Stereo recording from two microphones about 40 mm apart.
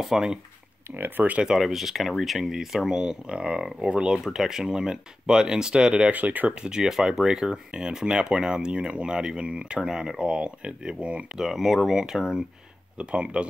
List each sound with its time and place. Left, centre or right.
0.0 s speech: centre
0.9 s speech: right
1.6 s speech: centre; by 4.2 s right
4.2 s speech: centre
6.1 s speech: right
6.6 s speech: centre
11.3 s speech: centre
12.9 s speech: right